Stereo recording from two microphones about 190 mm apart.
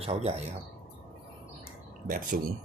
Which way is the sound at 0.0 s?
35° right (ahead or behind).